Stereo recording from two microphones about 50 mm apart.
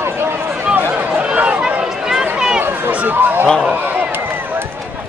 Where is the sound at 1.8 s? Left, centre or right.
Centre.